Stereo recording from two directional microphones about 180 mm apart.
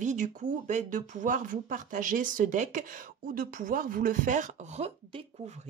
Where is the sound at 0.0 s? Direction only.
45° right (ahead or behind).